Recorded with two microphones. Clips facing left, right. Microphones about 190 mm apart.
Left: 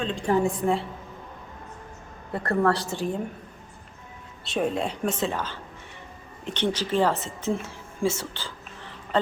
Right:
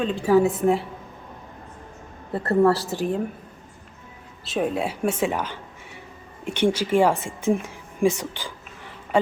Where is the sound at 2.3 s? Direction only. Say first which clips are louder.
Right 5 dB; 25° right (ahead or behind).